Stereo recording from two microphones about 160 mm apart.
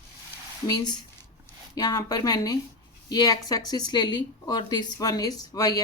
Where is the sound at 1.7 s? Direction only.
25° left (ahead or behind).